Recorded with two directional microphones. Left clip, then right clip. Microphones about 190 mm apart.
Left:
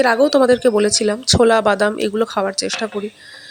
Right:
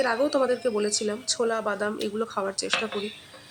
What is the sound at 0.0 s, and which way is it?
Speech, 35° left (ahead or behind).